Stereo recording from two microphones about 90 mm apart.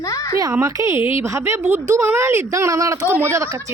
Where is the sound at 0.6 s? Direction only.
35° right (ahead or behind).